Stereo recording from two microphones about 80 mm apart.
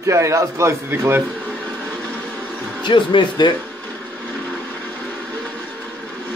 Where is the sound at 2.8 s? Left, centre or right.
Left.